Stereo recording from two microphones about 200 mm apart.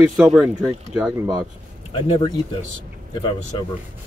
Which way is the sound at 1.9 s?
25° left (ahead or behind).